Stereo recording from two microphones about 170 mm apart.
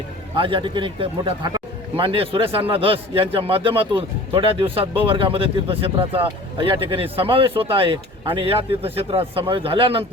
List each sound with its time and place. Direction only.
0.3 s a man's voice: 30° right (ahead or behind)